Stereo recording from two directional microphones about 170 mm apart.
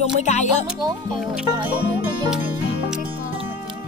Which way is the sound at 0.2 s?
45° left (ahead or behind).